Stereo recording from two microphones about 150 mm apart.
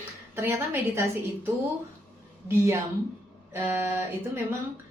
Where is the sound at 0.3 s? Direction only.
15° right (ahead or behind).